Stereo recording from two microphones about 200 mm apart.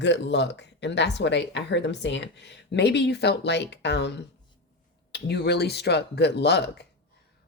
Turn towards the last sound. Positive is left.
turn(degrees=55)  # may be behind; listen again after turning